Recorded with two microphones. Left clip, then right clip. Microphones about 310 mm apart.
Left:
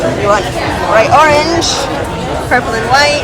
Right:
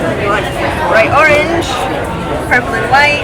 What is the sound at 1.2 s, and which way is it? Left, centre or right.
Speech, centre.